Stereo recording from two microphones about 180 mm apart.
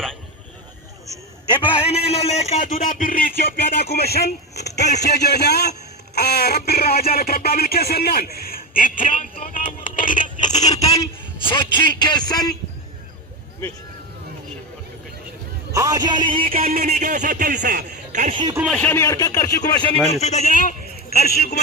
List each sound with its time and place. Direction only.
1.5 s a man's voice: 25° left (ahead or behind); by 9.7 s 50° left (ahead or behind)
9.9 s scrape: 50° left (ahead or behind)
10.5 s a sound: 20° left (ahead or behind)
11.4 s speech: 25° left (ahead or behind)
15.7 s a man's voice: 20° right (ahead or behind)
16.6 s speech: 50° right (ahead or behind)
18.7 s a man's voice: 10° left (ahead or behind); by 20.0 s 25° left (ahead or behind)
20.1 s a man's voice: 35° left (ahead or behind); by 21.6 s 60° left (ahead or behind)